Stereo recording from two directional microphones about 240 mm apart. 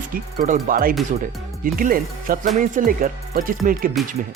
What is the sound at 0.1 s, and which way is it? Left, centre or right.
Speech, right.